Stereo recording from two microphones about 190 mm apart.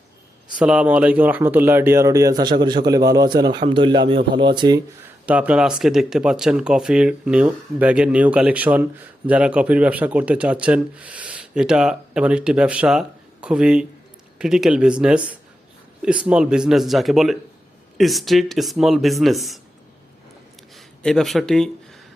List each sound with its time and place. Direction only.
0.6 s a man's voice: 5° right (ahead or behind); by 4.8 s 25° right (ahead or behind)
5.2 s speech: 5° right (ahead or behind)
20.7 s speech: 5° left (ahead or behind)